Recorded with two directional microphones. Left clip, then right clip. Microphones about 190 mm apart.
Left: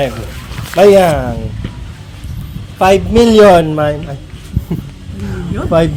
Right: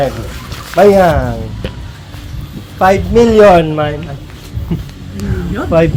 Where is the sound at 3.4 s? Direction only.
60° left (ahead or behind).